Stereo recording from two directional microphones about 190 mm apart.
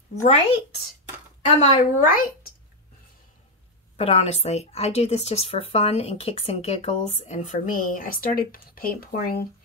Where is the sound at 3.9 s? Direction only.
35° left (ahead or behind).